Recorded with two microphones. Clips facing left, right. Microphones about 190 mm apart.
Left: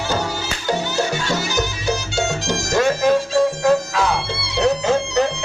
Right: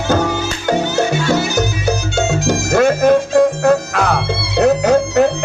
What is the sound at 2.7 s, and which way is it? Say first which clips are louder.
Music: right 5 dB; 55° right (ahead or behind).